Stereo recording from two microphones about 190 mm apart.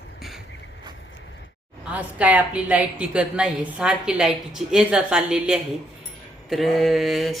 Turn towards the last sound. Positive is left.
turn(degrees=0)  # may be behind; listen again after turning